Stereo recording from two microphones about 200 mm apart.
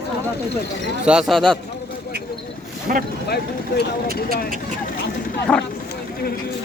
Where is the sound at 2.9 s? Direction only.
45° right (ahead or behind).